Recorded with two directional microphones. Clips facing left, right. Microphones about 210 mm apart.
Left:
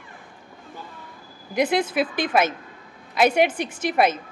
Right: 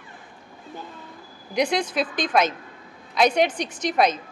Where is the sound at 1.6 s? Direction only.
5° left (ahead or behind).